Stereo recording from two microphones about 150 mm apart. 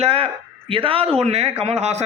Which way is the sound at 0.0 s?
40° right (ahead or behind).